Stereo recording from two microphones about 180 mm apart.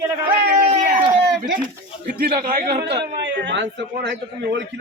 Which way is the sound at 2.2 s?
55° right (ahead or behind).